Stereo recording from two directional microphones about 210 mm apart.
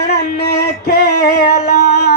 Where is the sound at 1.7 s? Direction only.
50° left (ahead or behind).